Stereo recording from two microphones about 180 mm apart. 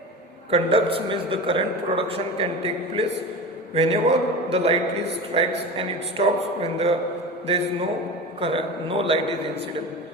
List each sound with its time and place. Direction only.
0.5 s a man's voice: 30° right (ahead or behind)